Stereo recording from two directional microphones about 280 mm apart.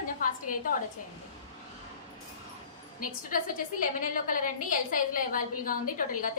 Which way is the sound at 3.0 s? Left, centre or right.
Left.